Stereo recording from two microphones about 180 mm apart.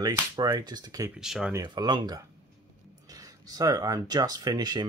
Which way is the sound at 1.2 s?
5° right (ahead or behind).